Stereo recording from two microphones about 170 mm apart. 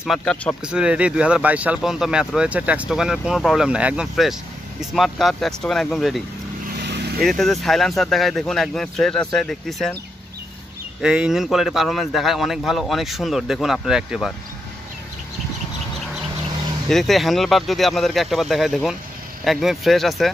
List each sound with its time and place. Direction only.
0.0 s speech: centre (ahead or behind)
0.7 s speech: 5° right (ahead or behind)
6.8 s vehicle: 70° right (ahead or behind)
7.2 s speech: centre (ahead or behind)
11.0 s speech: 5° right (ahead or behind)
16.9 s speech: centre (ahead or behind)